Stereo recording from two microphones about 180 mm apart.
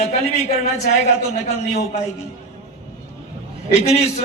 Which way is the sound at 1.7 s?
40° left (ahead or behind).